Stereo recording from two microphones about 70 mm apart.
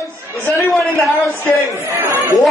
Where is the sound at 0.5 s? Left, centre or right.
Centre.